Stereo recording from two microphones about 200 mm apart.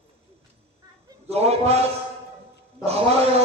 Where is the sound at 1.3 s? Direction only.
30° right (ahead or behind).